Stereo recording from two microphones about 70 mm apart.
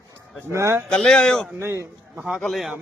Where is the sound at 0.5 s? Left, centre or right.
Right.